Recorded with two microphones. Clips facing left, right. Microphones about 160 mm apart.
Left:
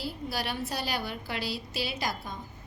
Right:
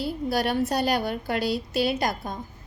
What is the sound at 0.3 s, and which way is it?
A woman's voice, 45° right (ahead or behind).